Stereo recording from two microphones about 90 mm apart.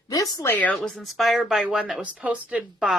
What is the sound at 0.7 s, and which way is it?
Speech, 5° left (ahead or behind).